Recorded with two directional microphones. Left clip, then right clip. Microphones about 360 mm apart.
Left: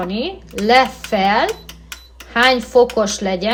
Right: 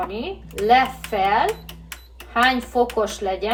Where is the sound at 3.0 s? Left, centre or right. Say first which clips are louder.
Left 4 dB; left.